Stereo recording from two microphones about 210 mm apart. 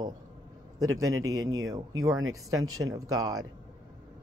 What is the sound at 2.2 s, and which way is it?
Speech, 80° right.